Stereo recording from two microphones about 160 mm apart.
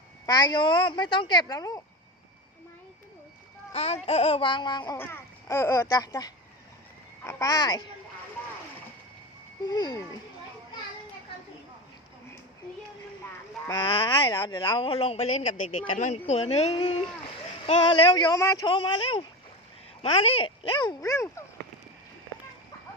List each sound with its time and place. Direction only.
0.3 s a woman's voice: 25° left (ahead or behind)
3.7 s a man's voice: 40° left (ahead or behind)
4.9 s a child's voice: 15° left (ahead or behind)
9.6 s a woman's voice: 25° left (ahead or behind)
13.7 s a man's voice: 30° left (ahead or behind)